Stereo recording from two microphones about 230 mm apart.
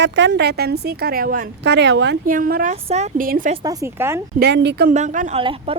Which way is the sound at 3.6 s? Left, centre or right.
Centre.